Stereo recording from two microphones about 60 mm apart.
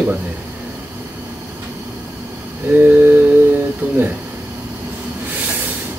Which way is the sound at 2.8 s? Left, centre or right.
Right.